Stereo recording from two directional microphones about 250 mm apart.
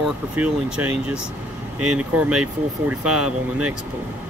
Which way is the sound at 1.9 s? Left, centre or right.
Centre.